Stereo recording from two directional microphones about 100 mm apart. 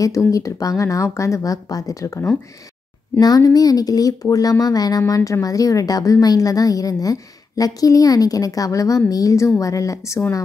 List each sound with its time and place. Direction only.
0.0 s a woman's voice: 35° left (ahead or behind)